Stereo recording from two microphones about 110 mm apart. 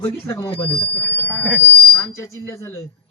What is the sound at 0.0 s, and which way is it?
Speech, 25° left (ahead or behind).